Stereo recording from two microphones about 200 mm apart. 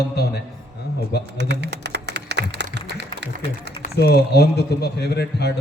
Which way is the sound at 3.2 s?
60° right (ahead or behind).